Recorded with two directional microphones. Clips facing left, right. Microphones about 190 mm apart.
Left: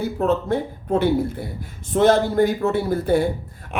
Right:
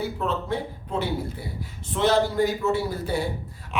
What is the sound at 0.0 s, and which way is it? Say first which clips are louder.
A man's voice: left 7 dB; 45° left (ahead or behind).